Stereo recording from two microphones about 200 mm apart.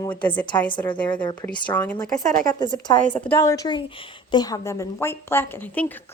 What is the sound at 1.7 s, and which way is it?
Speech, 5° left (ahead or behind).